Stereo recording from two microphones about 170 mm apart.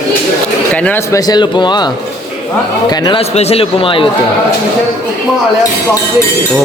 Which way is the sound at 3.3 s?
40° left (ahead or behind).